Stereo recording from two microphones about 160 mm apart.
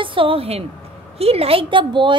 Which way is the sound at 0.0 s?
35° right (ahead or behind).